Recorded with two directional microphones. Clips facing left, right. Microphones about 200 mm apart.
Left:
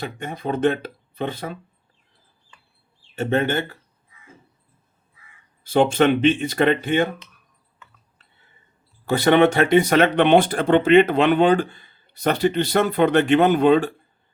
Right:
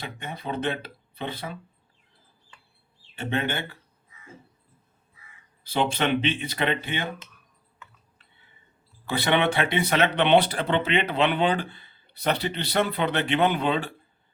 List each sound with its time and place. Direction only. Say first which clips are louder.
0.0 s speech: left 7 dB; 45° left (ahead or behind)
3.2 s speech: left 7 dB; 45° left (ahead or behind)
5.6 s speech: left 8 dB; 45° left (ahead or behind)
9.0 s speech: left 8 dB; 45° left (ahead or behind)